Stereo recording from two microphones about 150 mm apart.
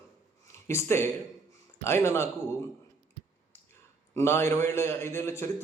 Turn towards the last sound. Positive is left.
turn(degrees=15)  # may be behind; listen again after turning